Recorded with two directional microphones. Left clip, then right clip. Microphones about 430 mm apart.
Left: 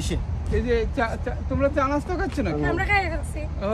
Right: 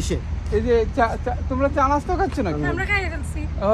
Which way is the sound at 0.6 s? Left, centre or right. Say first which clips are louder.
Right 5 dB; centre.